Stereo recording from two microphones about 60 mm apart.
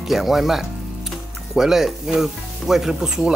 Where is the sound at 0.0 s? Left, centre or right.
Centre.